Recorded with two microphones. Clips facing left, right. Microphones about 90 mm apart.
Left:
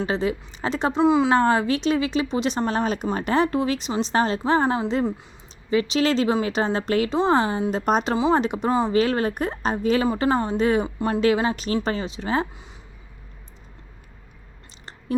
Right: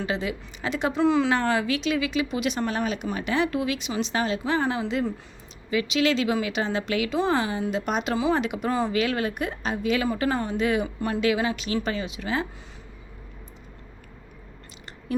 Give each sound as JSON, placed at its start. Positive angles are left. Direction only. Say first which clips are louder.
{"t": 0.0, "sound": "speech", "louder": "left 4 dB", "side_deg": 35}
{"t": 1.0, "sound": "speech", "louder": "left 3 dB", "side_deg": 20}
{"t": 1.3, "sound": "speech", "louder": "left 5 dB", "side_deg": 35}
{"t": 8.1, "sound": "speech", "louder": "left 2 dB", "side_deg": 25}
{"t": 8.4, "sound": "speech", "louder": "left 4 dB", "side_deg": 35}
{"t": 10.1, "sound": "speech", "louder": "left 4 dB", "side_deg": 25}